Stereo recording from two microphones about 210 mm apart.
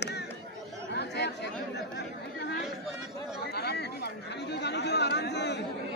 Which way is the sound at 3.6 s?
50° left (ahead or behind).